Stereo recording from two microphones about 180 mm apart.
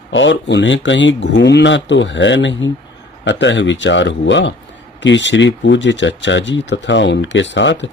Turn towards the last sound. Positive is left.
turn(degrees=85)